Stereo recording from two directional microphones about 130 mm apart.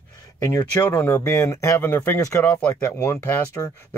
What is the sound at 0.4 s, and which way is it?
Speech, 25° left (ahead or behind).